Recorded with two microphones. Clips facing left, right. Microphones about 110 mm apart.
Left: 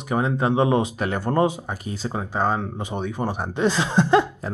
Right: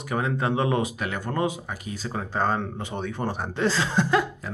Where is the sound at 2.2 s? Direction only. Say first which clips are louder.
Left 2 dB; 10° left (ahead or behind).